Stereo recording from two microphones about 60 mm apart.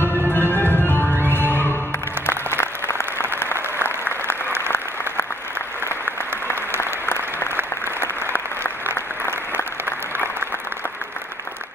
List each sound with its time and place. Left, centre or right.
0.3 s music: left
2.2 s applause: left
8.9 s applause: left